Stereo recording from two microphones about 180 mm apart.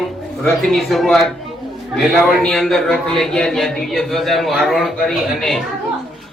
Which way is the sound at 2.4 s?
Centre (ahead or behind).